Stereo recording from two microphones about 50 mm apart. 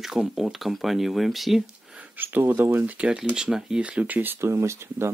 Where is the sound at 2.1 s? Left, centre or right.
Right.